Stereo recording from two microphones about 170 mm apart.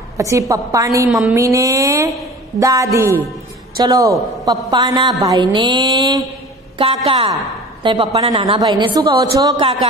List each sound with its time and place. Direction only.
0.2 s a woman's voice: 20° right (ahead or behind)
1.3 s a sound: 20° right (ahead or behind)
2.6 s a woman's voice: 20° right (ahead or behind)